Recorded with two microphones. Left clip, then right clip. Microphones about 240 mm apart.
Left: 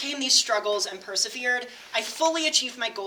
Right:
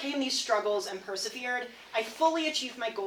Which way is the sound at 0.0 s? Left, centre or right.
Left.